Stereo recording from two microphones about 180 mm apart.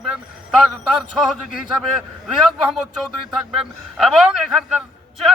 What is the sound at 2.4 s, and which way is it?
Speech, centre (ahead or behind).